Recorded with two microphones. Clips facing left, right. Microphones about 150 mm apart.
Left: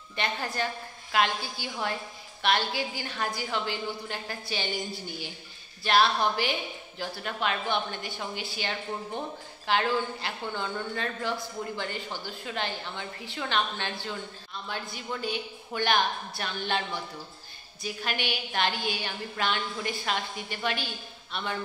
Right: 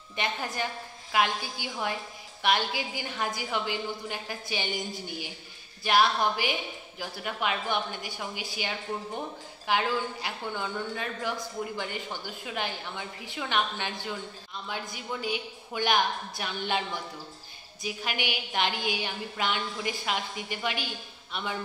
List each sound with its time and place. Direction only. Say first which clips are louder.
0.1 s a woman's voice: left 1 dB; 15° right (ahead or behind)